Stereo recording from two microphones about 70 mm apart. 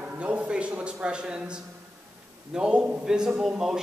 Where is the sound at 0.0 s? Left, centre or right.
Centre.